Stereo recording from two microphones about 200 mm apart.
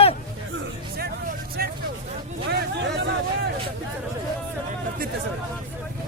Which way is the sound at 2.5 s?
55° right (ahead or behind).